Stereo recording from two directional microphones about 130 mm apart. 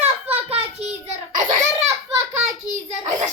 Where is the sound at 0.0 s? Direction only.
50° right (ahead or behind).